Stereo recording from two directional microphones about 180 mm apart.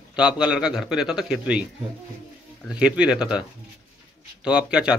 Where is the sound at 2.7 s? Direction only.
5° right (ahead or behind).